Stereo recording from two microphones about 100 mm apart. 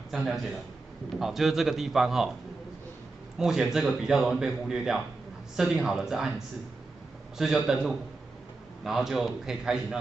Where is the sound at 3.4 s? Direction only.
5° right (ahead or behind).